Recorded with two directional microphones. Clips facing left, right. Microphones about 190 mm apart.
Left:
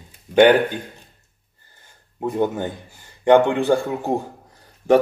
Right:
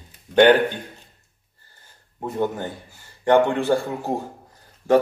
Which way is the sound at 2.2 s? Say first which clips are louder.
Left 3 dB; 15° left (ahead or behind).